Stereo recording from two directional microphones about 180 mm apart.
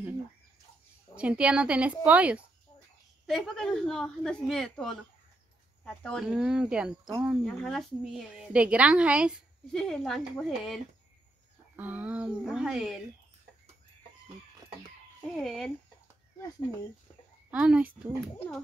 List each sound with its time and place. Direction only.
1.1 s a woman's voice: 5° right (ahead or behind)
6.0 s a woman's voice: centre (ahead or behind)
15.3 s a woman's voice: centre (ahead or behind)
17.5 s a woman's voice: 5° right (ahead or behind)